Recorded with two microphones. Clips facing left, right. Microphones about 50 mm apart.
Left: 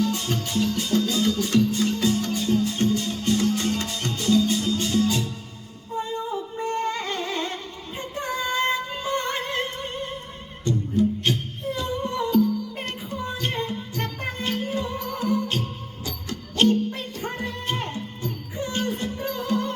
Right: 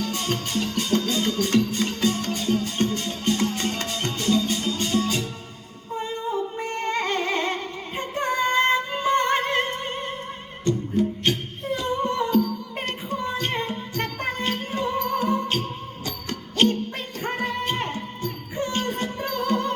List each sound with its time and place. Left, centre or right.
0.0 s music: right